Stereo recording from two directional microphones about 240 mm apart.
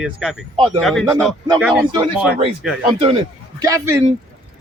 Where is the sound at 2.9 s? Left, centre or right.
Right.